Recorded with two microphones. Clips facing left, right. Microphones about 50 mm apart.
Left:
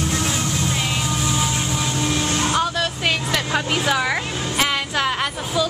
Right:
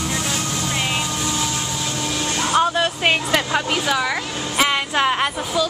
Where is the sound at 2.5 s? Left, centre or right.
Right.